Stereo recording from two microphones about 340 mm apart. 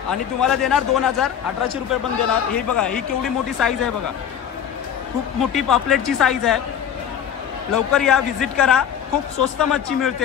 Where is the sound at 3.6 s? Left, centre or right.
Centre.